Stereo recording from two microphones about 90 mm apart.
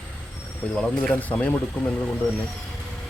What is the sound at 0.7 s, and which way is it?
Speech, 10° left (ahead or behind).